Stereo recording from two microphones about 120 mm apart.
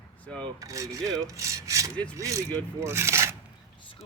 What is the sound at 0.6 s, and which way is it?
Rub, 30° right (ahead or behind).